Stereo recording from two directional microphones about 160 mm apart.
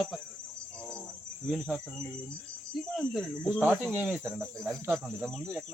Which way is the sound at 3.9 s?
10° right (ahead or behind).